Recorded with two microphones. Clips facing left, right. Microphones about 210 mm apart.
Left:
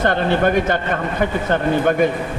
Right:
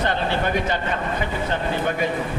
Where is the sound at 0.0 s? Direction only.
50° left (ahead or behind).